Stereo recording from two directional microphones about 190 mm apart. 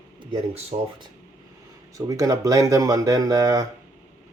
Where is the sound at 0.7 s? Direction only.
40° right (ahead or behind).